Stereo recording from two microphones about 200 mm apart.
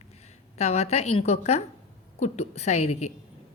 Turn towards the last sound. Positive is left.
turn(degrees=35)  # may be behind; listen again after turning